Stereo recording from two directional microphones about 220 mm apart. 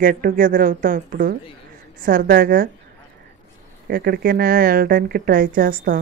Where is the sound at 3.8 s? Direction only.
45° right (ahead or behind).